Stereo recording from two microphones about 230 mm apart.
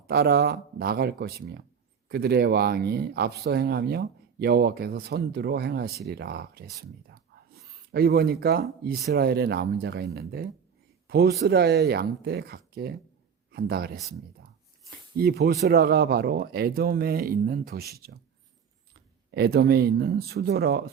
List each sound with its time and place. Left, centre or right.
0.1 s speech: right
14.8 s a sound: right
15.6 s speech: right
19.3 s speech: right